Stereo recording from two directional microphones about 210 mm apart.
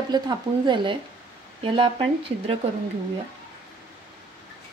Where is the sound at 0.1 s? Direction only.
20° right (ahead or behind).